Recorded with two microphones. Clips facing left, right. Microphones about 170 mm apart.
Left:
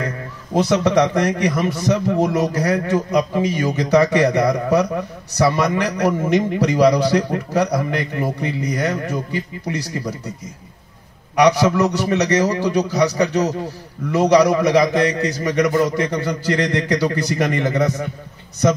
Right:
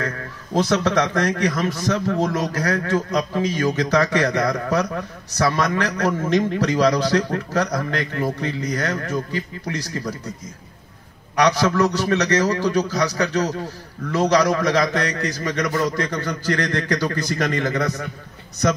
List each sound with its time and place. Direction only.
0.7 s a man's voice: 15° left (ahead or behind)
11.3 s a man's voice: 15° left (ahead or behind)